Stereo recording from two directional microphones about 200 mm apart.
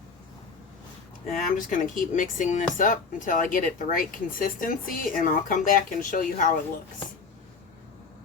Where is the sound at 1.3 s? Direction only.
40° left (ahead or behind).